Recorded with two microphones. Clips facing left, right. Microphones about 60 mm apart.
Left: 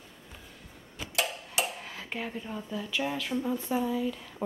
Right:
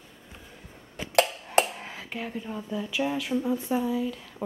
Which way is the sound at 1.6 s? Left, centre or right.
Right.